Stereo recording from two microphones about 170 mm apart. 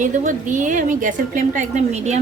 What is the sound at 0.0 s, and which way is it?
A woman's voice, 50° right (ahead or behind).